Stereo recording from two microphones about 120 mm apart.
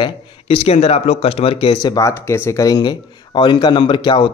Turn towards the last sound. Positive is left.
turn(degrees=45)  # may be behind; listen again after turning